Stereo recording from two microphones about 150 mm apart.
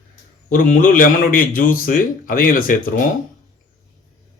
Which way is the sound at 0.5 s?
65° left (ahead or behind).